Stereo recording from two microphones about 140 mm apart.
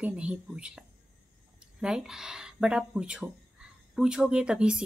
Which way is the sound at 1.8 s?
5° right (ahead or behind).